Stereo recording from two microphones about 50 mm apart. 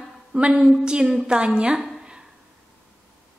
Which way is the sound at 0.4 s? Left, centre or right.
Centre.